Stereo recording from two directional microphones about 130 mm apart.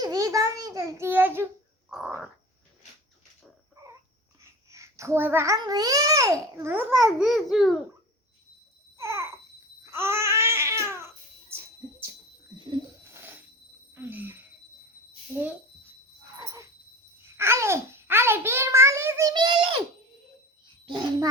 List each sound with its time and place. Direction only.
0.0 s a child's voice: 30° right (ahead or behind)
3.8 s a sound: 25° right (ahead or behind)
4.7 s a child's voice: 25° right (ahead or behind)
5.5 s a child's voice: 30° right (ahead or behind)
6.9 s a child's voice: centre (ahead or behind)
9.0 s babbling: 20° right (ahead or behind)
11.5 s a sound: 20° right (ahead or behind)
13.1 s a sound: 15° right (ahead or behind)
17.2 s a child's voice: 20° right (ahead or behind)
19.3 s a child's voice: 35° right (ahead or behind)
20.8 s a child's voice: 35° right (ahead or behind)